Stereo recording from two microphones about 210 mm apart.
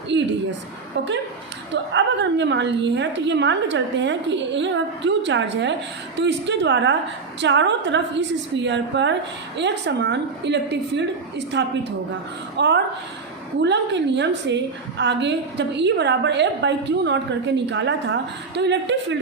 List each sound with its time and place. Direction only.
0.1 s a woman's voice: 60° right (ahead or behind)
1.7 s a woman's voice: 60° right (ahead or behind)